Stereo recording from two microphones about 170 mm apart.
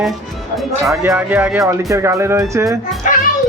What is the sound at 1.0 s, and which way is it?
Speech, 15° right (ahead or behind).